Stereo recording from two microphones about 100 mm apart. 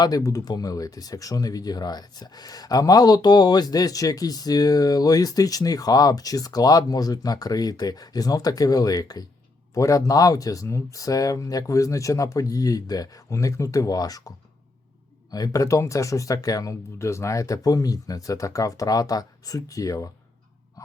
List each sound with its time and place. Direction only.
0.0 s speech: 35° left (ahead or behind)